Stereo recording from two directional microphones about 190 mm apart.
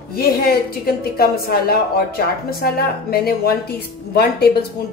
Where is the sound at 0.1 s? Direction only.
55° left (ahead or behind).